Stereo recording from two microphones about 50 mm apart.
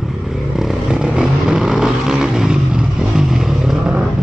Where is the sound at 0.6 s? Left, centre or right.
Centre.